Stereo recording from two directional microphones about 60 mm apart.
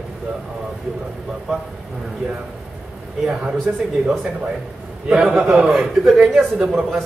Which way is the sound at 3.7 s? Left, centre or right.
Right.